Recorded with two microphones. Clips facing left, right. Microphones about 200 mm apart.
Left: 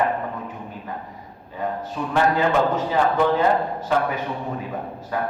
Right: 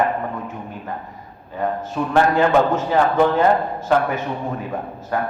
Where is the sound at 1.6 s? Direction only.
50° right (ahead or behind).